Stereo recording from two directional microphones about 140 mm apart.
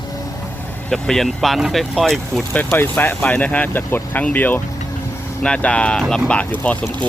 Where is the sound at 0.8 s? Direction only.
5° left (ahead or behind).